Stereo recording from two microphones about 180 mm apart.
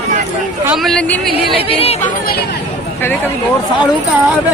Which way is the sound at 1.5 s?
30° left (ahead or behind).